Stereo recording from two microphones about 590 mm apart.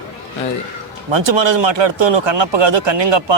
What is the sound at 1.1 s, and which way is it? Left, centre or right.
Speech, right.